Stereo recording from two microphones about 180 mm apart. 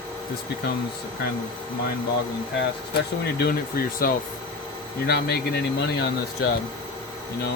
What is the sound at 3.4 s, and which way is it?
Speech, 55° left (ahead or behind).